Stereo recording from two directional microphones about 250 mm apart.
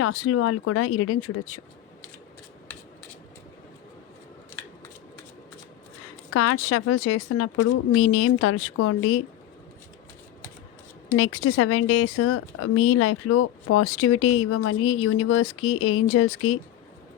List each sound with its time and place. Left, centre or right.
0.0 s speech: left
6.3 s speech: left
11.1 s speech: left